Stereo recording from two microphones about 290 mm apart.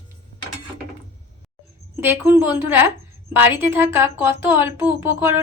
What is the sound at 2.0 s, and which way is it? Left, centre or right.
A woman's voice, centre.